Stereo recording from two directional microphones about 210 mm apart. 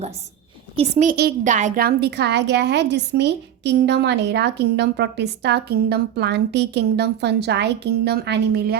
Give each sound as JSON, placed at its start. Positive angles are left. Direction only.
{"t": 0.8, "sound": "a woman's voice", "side_deg": -30}